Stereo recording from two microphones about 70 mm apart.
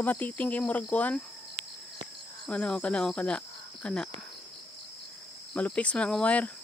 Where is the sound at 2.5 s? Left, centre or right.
Centre.